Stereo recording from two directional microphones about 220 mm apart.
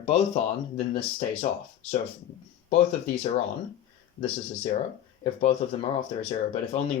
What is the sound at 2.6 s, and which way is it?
Speech, 30° left (ahead or behind).